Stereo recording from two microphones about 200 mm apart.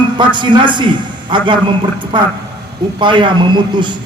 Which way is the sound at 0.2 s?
25° right (ahead or behind).